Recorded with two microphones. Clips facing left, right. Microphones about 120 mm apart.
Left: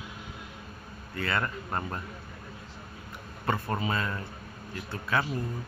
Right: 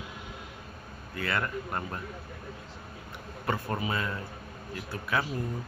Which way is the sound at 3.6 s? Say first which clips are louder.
Left 1 dB; 25° left (ahead or behind).